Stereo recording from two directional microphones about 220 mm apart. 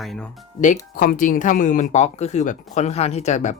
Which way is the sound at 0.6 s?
40° left (ahead or behind).